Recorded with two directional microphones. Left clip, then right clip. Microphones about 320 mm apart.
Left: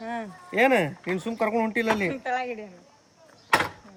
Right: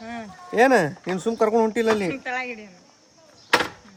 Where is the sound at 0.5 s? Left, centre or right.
Centre.